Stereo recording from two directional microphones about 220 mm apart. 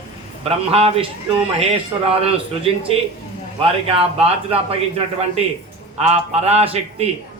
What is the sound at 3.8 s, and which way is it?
Speech, 25° right (ahead or behind).